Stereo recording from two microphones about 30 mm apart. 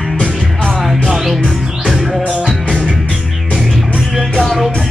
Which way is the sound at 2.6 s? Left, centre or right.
Left.